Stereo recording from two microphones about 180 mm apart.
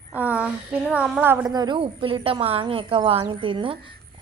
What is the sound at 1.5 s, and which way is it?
A woman's voice, 25° right (ahead or behind).